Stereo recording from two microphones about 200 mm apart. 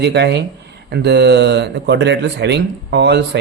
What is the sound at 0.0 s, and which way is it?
Speech, 55° right (ahead or behind).